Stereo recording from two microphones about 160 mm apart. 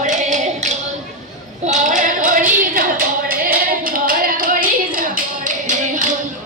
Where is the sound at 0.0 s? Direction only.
50° right (ahead or behind).